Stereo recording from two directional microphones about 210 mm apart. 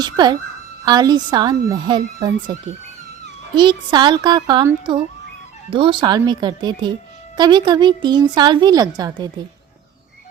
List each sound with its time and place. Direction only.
0.0 s speech: 20° right (ahead or behind)